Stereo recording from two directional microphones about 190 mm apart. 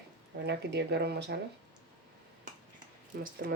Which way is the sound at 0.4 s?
65° right (ahead or behind).